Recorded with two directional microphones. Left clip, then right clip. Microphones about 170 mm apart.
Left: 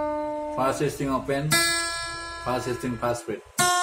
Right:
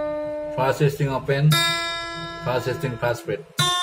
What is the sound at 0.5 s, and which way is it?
Speech, 5° right (ahead or behind).